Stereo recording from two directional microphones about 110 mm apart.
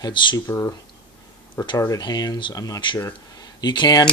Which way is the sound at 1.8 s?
35° left (ahead or behind).